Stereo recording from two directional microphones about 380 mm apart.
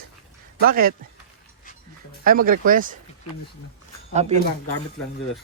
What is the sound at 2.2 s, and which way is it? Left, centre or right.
Speech, right.